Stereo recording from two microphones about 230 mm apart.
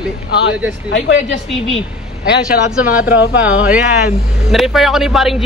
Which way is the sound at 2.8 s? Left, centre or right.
Centre.